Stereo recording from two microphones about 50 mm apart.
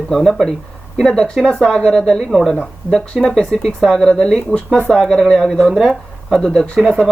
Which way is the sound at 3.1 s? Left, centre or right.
Right.